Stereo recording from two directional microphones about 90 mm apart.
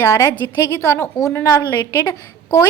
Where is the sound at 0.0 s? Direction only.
30° left (ahead or behind).